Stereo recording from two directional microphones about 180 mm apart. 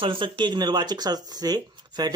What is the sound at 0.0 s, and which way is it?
Speech, 30° right (ahead or behind).